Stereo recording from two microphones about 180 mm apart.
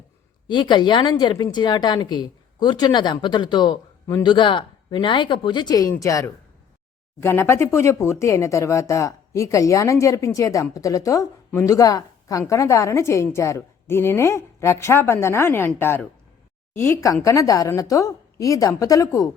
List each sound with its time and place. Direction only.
0.4 s a woman's voice: 25° left (ahead or behind)